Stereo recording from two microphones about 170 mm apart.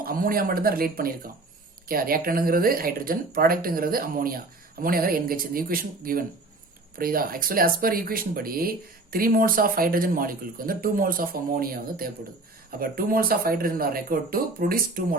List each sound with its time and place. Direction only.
0.0 s speech: 55° right (ahead or behind)